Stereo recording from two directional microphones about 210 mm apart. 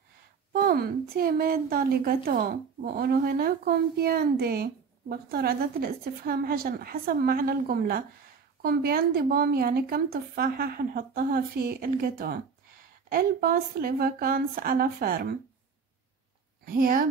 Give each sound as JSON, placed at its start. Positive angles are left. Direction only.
{"t": 0.5, "sound": "a woman's voice", "side_deg": -45}
{"t": 16.7, "sound": "a woman's voice", "side_deg": -45}